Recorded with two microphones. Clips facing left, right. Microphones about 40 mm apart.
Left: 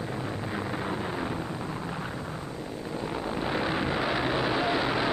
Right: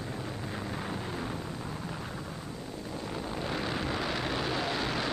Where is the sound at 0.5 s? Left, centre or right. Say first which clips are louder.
Left 5 dB; centre.